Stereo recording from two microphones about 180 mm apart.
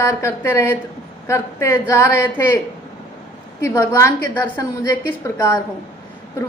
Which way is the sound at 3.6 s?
15° left (ahead or behind).